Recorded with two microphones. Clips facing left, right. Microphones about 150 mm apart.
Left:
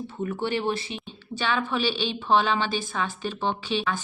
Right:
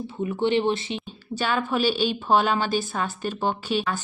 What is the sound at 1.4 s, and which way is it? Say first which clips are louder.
A woman's voice: right 2 dB; 40° right (ahead or behind).